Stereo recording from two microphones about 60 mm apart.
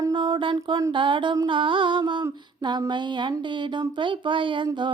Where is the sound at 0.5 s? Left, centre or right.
Right.